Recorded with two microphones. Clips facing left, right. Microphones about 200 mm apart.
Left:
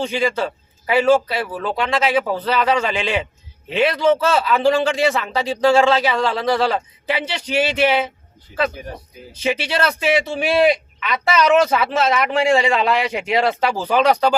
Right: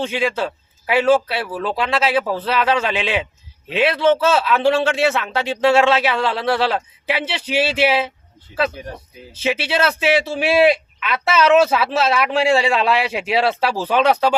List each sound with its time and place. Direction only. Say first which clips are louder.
0.0 s a man's voice: left 1 dB; centre (ahead or behind)
9.3 s a man's voice: right 1 dB; 5° right (ahead or behind)